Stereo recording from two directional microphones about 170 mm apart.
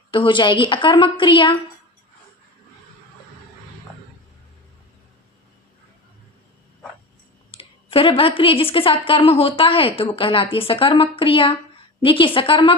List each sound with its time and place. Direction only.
0.1 s a woman's voice: 30° left (ahead or behind)
7.5 s speech: 35° left (ahead or behind)